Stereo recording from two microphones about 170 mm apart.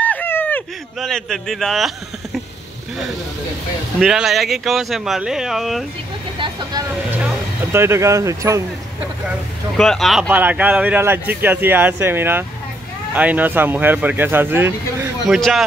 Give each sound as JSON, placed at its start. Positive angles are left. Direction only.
{"t": 0.0, "sound": "a sound", "side_deg": 10}
{"t": 0.9, "sound": "speech", "side_deg": 0}
{"t": 4.0, "sound": "speech", "side_deg": 0}
{"t": 6.3, "sound": "vehicle", "side_deg": -30}
{"t": 7.7, "sound": "speech", "side_deg": -15}
{"t": 9.8, "sound": "speech", "side_deg": 0}
{"t": 15.3, "sound": "speech", "side_deg": 0}